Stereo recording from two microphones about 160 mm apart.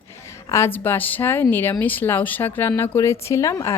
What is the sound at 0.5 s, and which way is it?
A woman's voice, 15° left (ahead or behind).